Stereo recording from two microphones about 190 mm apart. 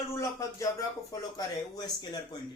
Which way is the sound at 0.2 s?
15° left (ahead or behind).